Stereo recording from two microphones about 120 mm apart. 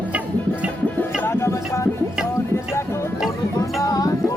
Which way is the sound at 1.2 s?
20° left (ahead or behind).